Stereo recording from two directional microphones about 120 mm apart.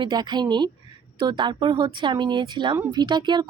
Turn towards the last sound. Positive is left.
turn(degrees=-40)  # may be behind; listen again after turning